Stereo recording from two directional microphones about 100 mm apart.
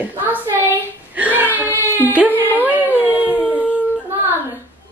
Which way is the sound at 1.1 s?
15° right (ahead or behind).